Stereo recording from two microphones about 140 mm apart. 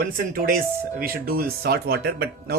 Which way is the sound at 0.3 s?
90° right.